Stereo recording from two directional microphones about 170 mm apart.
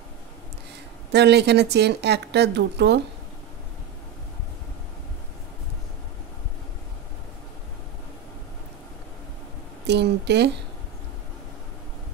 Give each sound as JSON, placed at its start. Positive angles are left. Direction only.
{"t": 1.1, "sound": "a woman's voice", "side_deg": -80}
{"t": 9.8, "sound": "a woman's voice", "side_deg": -80}